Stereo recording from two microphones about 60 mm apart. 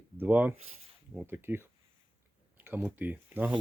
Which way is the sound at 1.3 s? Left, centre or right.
Right.